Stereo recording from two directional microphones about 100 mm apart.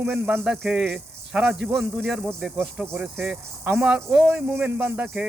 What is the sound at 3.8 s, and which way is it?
Speech, 5° right (ahead or behind).